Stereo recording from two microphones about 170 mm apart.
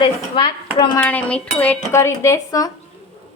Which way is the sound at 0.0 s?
30° left (ahead or behind).